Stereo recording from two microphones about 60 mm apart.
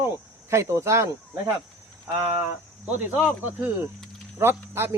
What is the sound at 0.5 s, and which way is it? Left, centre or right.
Speech, right.